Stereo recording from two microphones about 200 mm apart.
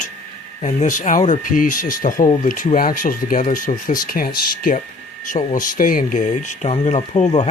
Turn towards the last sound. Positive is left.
turn(degrees=35)  # may be behind; listen again after turning